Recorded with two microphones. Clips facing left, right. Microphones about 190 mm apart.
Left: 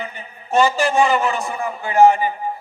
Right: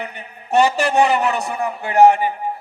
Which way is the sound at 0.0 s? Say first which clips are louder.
Right 1 dB; 65° right (ahead or behind).